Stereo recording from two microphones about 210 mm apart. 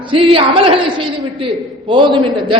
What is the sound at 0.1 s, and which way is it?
A woman's voice, 25° right (ahead or behind).